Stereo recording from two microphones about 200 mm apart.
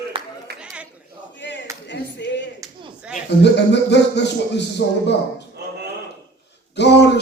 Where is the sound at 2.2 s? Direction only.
60° left (ahead or behind).